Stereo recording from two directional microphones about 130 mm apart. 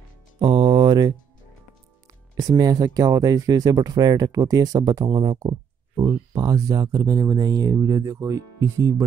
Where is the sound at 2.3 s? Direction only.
30° right (ahead or behind).